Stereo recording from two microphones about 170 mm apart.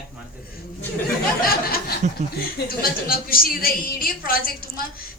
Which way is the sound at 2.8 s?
60° left (ahead or behind).